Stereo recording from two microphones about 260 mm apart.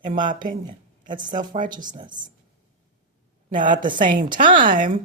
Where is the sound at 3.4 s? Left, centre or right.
Right.